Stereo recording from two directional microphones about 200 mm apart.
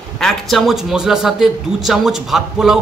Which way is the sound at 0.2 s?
Centre (ahead or behind).